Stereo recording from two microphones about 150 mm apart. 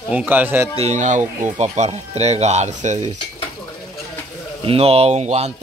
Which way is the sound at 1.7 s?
45° right (ahead or behind).